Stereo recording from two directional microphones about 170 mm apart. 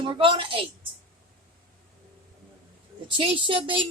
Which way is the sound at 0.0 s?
30° right (ahead or behind).